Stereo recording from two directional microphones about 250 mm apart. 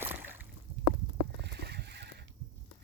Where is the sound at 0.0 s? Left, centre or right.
Centre.